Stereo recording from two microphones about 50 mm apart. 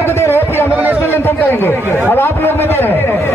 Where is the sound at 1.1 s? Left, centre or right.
Left.